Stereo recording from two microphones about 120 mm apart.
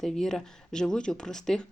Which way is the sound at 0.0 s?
Centre (ahead or behind).